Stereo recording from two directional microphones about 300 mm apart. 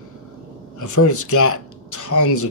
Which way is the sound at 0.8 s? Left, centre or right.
Left.